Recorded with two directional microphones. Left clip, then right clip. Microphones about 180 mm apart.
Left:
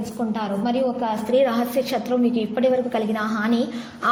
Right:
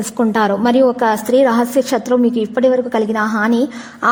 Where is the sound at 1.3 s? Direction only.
45° right (ahead or behind).